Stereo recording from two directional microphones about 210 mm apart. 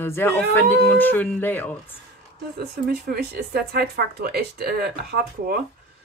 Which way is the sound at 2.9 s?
50° right (ahead or behind).